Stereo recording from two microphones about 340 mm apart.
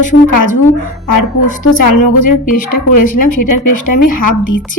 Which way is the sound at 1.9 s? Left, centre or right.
Left.